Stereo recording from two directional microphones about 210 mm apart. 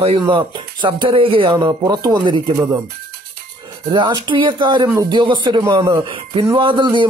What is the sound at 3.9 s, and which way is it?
Speech, 20° right (ahead or behind).